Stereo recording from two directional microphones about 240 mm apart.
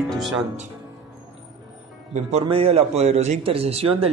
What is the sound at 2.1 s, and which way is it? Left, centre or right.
A man's voice, right.